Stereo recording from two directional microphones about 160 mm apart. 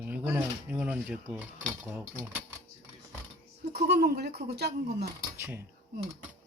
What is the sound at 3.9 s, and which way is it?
Speech, 85° right.